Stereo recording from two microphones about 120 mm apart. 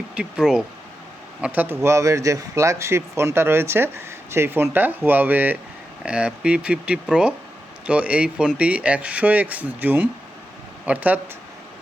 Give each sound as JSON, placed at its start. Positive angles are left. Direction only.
{"t": 0.1, "sound": "a man's voice", "side_deg": -10}